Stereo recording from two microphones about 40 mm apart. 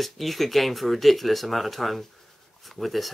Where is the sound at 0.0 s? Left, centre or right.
Centre.